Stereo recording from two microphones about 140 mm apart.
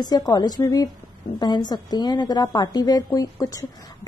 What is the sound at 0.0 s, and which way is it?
A woman's voice, 30° left (ahead or behind).